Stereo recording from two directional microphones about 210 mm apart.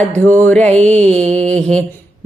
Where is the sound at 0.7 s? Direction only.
30° right (ahead or behind).